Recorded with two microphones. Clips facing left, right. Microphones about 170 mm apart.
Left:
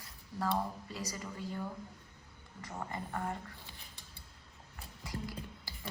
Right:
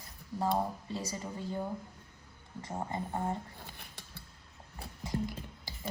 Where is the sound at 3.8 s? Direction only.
70° right (ahead or behind).